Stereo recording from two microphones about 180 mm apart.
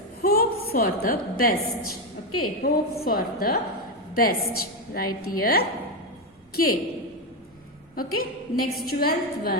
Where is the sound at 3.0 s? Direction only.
55° left (ahead or behind).